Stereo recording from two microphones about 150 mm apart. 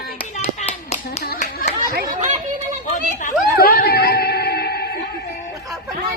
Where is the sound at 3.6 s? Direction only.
85° left.